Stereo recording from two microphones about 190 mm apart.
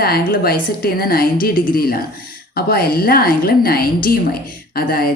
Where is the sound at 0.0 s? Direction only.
55° left (ahead or behind).